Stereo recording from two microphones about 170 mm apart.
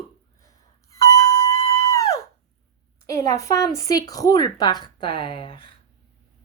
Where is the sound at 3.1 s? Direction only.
20° left (ahead or behind).